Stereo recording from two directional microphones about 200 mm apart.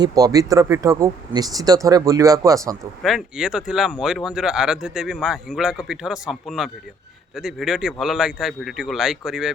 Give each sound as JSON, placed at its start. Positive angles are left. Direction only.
{"t": 0.0, "sound": "speech", "side_deg": -20}
{"t": 3.0, "sound": "speech", "side_deg": 0}